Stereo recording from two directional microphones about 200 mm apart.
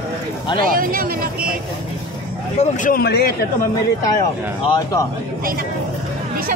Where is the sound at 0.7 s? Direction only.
45° right (ahead or behind).